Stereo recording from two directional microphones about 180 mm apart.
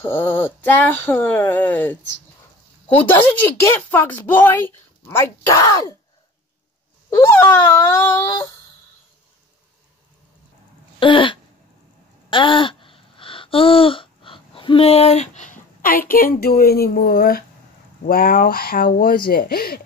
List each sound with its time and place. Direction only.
0.0 s a woman's voice: 10° left (ahead or behind)
7.2 s a woman's voice: 10° left (ahead or behind)
11.0 s a sound: 30° left (ahead or behind); by 16.0 s 50° left (ahead or behind)
16.1 s speech: 55° left (ahead or behind)